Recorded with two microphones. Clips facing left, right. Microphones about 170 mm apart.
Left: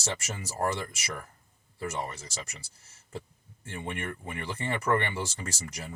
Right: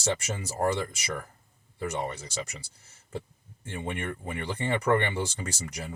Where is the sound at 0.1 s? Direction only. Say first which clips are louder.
Right 5 dB; 30° right (ahead or behind).